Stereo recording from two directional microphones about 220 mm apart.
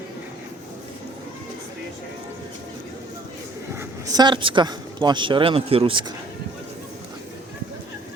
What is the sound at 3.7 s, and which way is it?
Speech, 15° right (ahead or behind).